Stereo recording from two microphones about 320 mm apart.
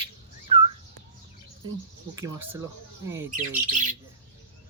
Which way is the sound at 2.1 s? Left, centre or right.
Centre.